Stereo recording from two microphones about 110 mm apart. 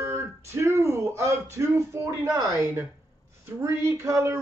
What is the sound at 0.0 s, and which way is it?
A man's voice, 25° right (ahead or behind).